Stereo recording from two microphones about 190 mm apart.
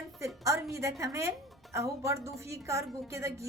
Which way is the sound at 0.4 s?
15° right (ahead or behind).